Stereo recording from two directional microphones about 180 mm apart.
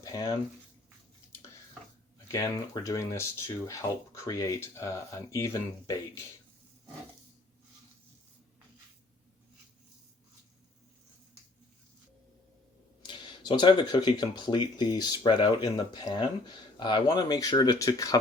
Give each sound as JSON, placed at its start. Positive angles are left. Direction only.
{"t": 0.0, "sound": "speech", "side_deg": 20}
{"t": 2.2, "sound": "speech", "side_deg": 20}
{"t": 13.0, "sound": "speech", "side_deg": 25}